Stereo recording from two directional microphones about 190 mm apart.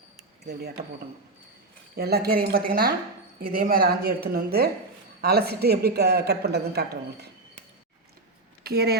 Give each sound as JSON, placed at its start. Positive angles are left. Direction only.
{"t": 0.4, "sound": "a man's voice", "side_deg": -55}
{"t": 2.0, "sound": "a woman's voice", "side_deg": -55}
{"t": 8.6, "sound": "speech", "side_deg": -55}